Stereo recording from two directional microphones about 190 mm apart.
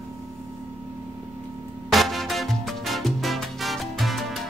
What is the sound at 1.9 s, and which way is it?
Music, centre (ahead or behind).